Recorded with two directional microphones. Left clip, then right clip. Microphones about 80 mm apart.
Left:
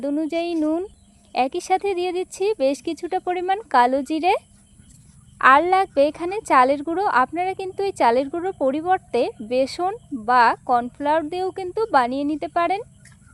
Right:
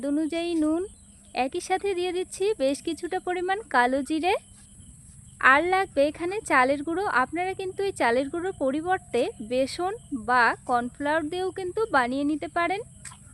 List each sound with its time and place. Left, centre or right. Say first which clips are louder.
0.1 s a woman's voice: left 2 dB; left
1.3 s a woman's voice: left 6 dB; left